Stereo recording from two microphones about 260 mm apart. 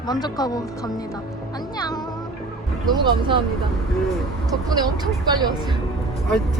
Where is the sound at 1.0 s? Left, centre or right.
Centre.